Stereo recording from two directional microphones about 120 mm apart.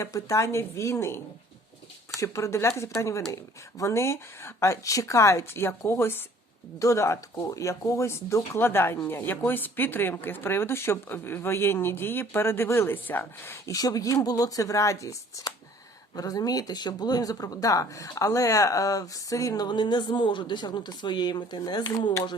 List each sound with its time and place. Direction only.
0.0 s speech: 25° left (ahead or behind)
2.2 s speech: 25° left (ahead or behind)
13.7 s speech: 30° left (ahead or behind)